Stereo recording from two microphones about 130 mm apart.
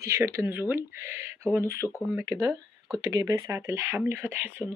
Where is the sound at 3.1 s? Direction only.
30° right (ahead or behind).